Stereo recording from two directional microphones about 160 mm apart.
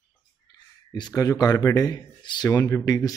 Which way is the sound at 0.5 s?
25° left (ahead or behind).